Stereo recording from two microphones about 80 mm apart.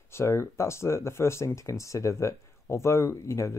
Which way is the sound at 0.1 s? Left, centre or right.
Left.